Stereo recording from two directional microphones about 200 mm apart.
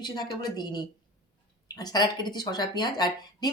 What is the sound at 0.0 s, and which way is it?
A woman's voice, 20° left (ahead or behind).